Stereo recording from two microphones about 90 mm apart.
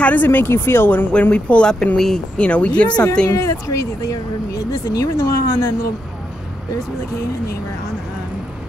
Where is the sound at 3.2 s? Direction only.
35° left (ahead or behind).